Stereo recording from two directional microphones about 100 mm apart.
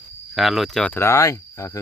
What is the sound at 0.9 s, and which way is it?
Speech, 25° left (ahead or behind).